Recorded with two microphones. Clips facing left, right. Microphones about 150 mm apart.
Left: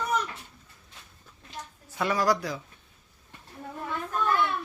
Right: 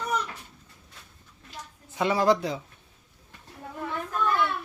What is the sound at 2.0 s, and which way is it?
Speech, 20° right (ahead or behind).